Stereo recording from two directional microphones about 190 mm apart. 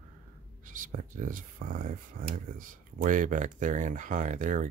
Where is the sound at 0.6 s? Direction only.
45° right (ahead or behind).